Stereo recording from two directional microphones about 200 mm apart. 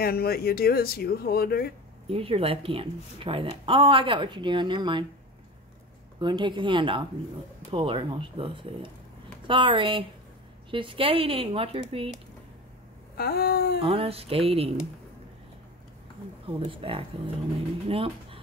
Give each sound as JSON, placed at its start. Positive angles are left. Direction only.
{"t": 0.0, "sound": "speech", "side_deg": 50}
{"t": 2.0, "sound": "a woman's voice", "side_deg": -30}
{"t": 6.1, "sound": "a woman's voice", "side_deg": -25}
{"t": 13.1, "sound": "speech", "side_deg": 50}
{"t": 13.7, "sound": "a woman's voice", "side_deg": -30}
{"t": 16.4, "sound": "a woman's voice", "side_deg": -25}